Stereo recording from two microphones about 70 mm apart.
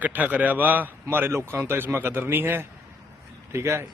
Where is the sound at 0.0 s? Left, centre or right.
Right.